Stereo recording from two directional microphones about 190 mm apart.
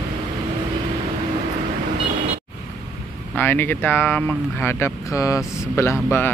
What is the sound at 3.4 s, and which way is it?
Speech, 10° left (ahead or behind).